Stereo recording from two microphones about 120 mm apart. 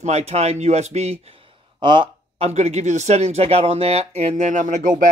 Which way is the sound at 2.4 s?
65° right (ahead or behind).